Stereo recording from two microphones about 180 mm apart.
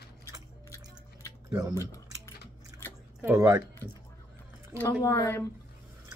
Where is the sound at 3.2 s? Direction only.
15° right (ahead or behind).